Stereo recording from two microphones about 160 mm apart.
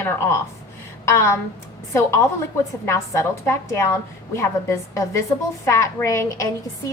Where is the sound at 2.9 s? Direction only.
15° left (ahead or behind).